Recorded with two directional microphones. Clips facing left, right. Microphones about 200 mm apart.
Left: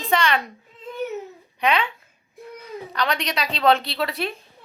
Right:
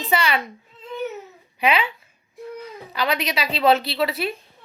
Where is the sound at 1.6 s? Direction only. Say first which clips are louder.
Right 1 dB; 5° right (ahead or behind).